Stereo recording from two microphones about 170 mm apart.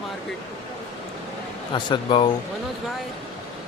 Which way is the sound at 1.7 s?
25° left (ahead or behind).